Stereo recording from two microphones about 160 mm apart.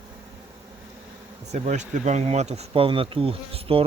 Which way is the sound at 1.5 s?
45° right (ahead or behind).